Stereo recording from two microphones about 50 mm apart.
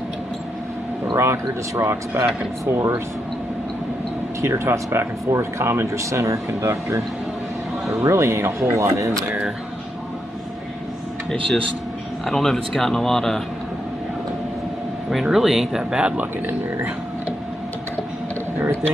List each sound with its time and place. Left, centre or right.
1.1 s speech: right
4.4 s speech: right
4.8 s speech: right
8.1 s speech: right
8.7 s speech: right
12.3 s speech: centre
15.2 s speech: centre